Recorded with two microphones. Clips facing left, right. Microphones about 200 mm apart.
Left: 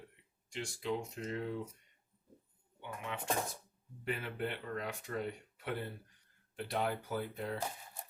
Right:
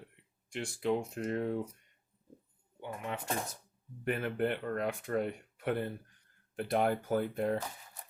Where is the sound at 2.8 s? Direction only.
40° right (ahead or behind).